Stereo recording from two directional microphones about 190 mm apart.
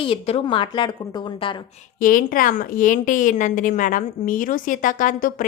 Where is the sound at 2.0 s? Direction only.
45° left (ahead or behind).